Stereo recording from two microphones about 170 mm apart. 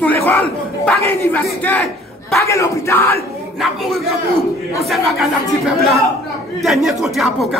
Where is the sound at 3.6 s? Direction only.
Centre (ahead or behind).